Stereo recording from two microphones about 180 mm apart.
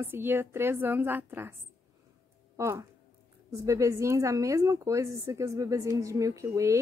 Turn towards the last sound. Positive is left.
turn(degrees=-15)  # may be behind; listen again after turning